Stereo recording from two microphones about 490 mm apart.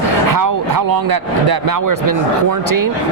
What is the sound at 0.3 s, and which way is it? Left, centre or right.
Speech, right.